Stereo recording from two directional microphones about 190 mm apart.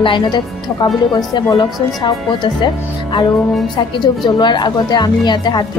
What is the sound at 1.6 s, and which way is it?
A woman's voice, 25° left (ahead or behind).